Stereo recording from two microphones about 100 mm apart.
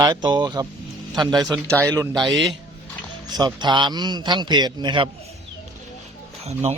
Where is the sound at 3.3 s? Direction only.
45° right (ahead or behind).